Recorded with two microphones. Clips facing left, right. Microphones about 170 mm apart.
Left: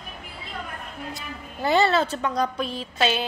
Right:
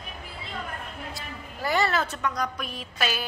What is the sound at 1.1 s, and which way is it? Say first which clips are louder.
A woman's voice: left 2 dB; 25° left (ahead or behind).